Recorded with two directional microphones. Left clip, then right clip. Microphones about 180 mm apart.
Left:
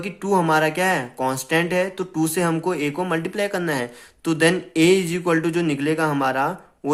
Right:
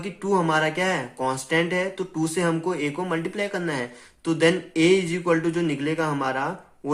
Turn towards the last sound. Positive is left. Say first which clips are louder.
# left 4 dB
turn(degrees=35)  # may be behind; listen again after turning